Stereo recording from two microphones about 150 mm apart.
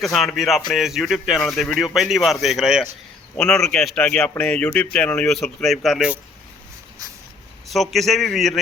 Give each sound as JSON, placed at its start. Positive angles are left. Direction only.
{"t": 0.0, "sound": "speech", "side_deg": 0}
{"t": 7.7, "sound": "speech", "side_deg": 0}